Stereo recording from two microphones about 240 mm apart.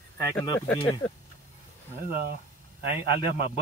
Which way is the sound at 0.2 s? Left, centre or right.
Centre.